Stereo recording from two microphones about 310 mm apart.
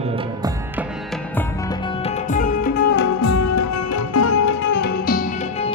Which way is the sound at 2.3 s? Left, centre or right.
Left.